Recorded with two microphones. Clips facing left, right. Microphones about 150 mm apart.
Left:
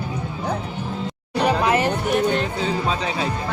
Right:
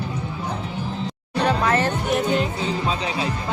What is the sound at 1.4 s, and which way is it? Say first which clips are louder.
Music: left 1 dB; 10° left (ahead or behind).